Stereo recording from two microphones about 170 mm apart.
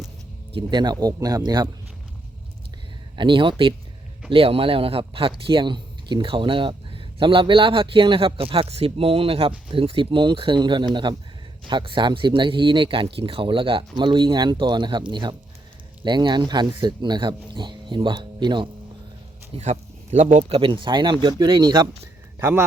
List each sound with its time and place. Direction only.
0.5 s speech: 25° right (ahead or behind)
3.2 s speech: 30° right (ahead or behind)
19.5 s speech: 40° right (ahead or behind)
20.6 s speech: 30° right (ahead or behind)
22.4 s a man's voice: 15° right (ahead or behind)